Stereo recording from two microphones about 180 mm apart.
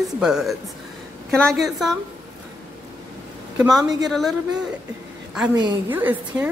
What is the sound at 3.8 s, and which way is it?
Speech, 20° right (ahead or behind).